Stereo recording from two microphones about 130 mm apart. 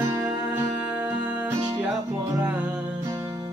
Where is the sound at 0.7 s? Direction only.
10° right (ahead or behind).